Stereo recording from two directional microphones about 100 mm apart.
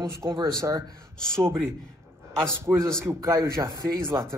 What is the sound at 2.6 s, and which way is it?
A man's voice, 30° right (ahead or behind).